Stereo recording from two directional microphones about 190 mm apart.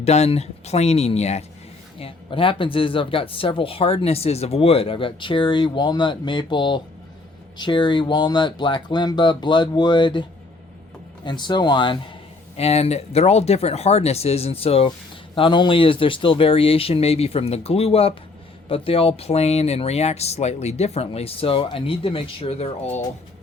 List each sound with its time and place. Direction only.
0.0 s speech: 35° left (ahead or behind)
11.3 s speech: 25° left (ahead or behind)